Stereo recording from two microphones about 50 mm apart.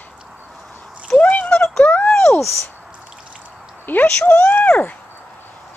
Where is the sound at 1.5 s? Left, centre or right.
Centre.